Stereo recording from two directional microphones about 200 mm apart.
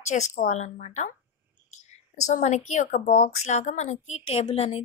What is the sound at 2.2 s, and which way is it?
A woman's voice, 35° left (ahead or behind).